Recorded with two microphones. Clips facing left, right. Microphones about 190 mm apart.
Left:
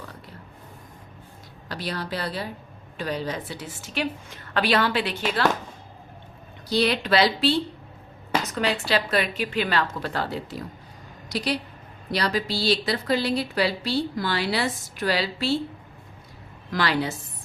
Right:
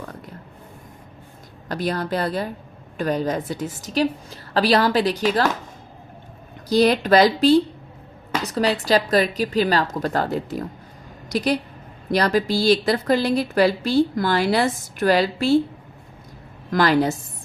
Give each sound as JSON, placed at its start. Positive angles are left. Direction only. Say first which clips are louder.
{"t": 1.6, "sound": "a woman's voice", "louder": "right 7 dB", "side_deg": -45}
{"t": 6.7, "sound": "a woman's voice", "louder": "right 6 dB", "side_deg": -45}
{"t": 16.7, "sound": "a woman's voice", "louder": "right 7 dB", "side_deg": -45}